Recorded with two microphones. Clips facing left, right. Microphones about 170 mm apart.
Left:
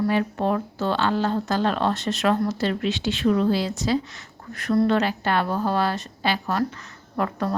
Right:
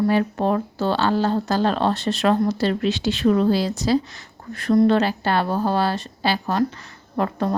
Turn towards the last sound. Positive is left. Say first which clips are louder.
# right 3 dB
turn(degrees=-25)  # may be behind; listen again after turning